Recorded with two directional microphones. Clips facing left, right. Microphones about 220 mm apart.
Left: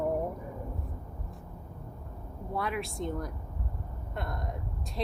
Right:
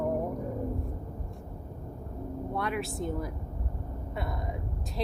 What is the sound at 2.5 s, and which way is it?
Speech, centre (ahead or behind).